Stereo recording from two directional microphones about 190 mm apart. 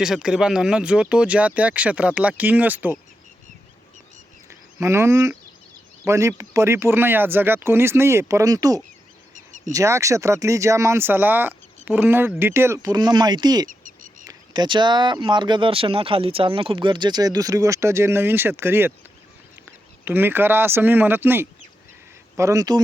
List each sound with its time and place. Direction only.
0.0 s speech: 5° right (ahead or behind)
4.4 s a sound: 15° right (ahead or behind)
6.1 s speech: 15° right (ahead or behind)
9.3 s a sound: 40° right (ahead or behind)
9.7 s speech: 15° right (ahead or behind)
13.7 s bird: 45° right (ahead or behind)
14.3 s speech: 25° right (ahead or behind)